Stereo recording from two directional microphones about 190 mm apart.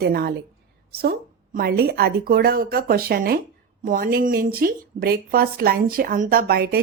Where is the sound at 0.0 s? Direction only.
55° right (ahead or behind).